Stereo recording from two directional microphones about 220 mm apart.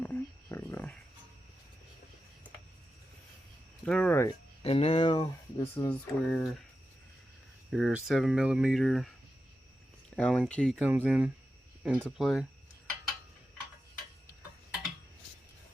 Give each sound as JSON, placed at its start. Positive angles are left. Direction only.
{"t": 0.0, "sound": "a sound", "side_deg": 10}
{"t": 3.8, "sound": "speech", "side_deg": 5}
{"t": 4.6, "sound": "speech", "side_deg": 25}
{"t": 7.7, "sound": "speech", "side_deg": -5}
{"t": 10.2, "sound": "speech", "side_deg": 5}
{"t": 10.8, "sound": "speech", "side_deg": -5}